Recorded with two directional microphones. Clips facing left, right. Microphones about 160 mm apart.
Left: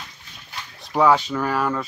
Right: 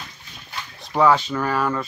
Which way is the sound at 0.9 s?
10° left (ahead or behind).